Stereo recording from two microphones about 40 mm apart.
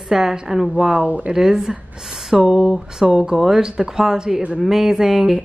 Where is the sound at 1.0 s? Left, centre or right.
Right.